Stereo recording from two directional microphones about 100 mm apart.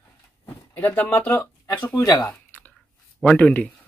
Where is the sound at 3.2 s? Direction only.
10° left (ahead or behind).